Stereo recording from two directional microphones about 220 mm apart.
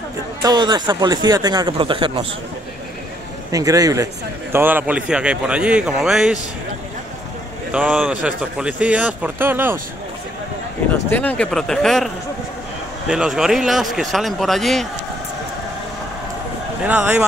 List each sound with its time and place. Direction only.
0.4 s speech: 20° right (ahead or behind)
3.5 s a man's voice: 15° right (ahead or behind)
7.7 s a man's voice: 5° right (ahead or behind)
11.1 s a man's voice: 5° left (ahead or behind)
13.1 s a man's voice: 5° right (ahead or behind)
16.8 s speech: 5° right (ahead or behind)